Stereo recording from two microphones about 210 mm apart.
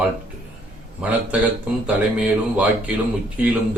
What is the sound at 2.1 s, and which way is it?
Speech, 5° right (ahead or behind).